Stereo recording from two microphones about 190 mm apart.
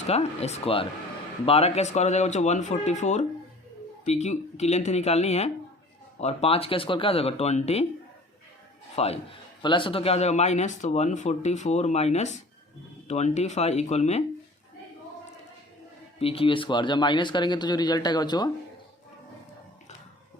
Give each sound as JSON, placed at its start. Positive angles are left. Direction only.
{"t": 0.1, "sound": "speech", "side_deg": 35}
{"t": 9.0, "sound": "speech", "side_deg": 35}
{"t": 16.1, "sound": "speech", "side_deg": 30}